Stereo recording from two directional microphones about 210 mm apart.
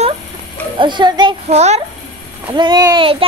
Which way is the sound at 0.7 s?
20° right (ahead or behind).